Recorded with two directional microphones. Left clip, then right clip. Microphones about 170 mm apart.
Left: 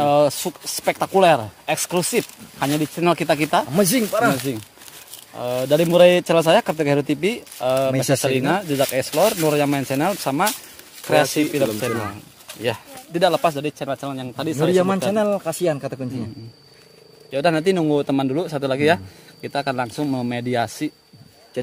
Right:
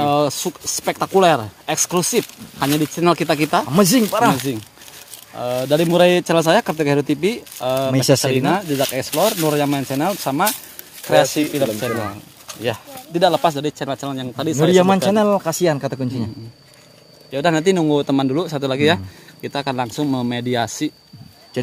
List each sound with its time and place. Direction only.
0.0 s speech: 10° left (ahead or behind)
3.7 s speech: 40° right (ahead or behind)
5.3 s speech: 5° left (ahead or behind)
15.1 s speech: 55° right (ahead or behind)
17.3 s speech: centre (ahead or behind)